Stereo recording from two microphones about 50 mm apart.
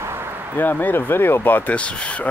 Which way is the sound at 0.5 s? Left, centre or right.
Left.